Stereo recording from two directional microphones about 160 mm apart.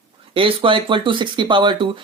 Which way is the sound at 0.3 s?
35° right (ahead or behind).